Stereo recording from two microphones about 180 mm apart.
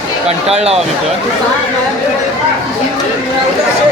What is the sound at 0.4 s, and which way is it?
Speech, 35° right (ahead or behind).